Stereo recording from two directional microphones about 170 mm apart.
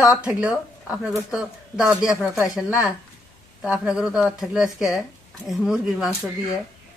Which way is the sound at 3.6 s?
5° right (ahead or behind).